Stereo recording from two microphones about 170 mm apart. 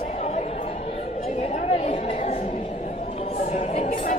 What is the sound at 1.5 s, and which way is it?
Chatter, 35° left (ahead or behind).